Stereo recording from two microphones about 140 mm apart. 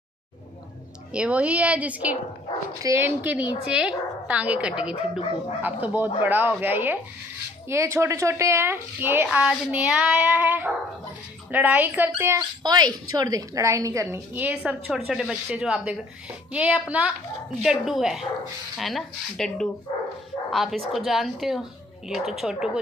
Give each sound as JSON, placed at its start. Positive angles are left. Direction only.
{"t": 1.1, "sound": "a woman's voice", "side_deg": -10}
{"t": 12.6, "sound": "a woman's voice", "side_deg": -30}